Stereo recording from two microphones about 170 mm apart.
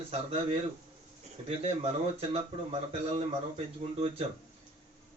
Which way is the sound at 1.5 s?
35° right (ahead or behind).